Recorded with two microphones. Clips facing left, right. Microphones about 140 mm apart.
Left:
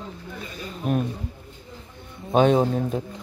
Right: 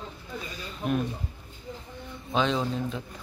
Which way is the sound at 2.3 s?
50° left (ahead or behind).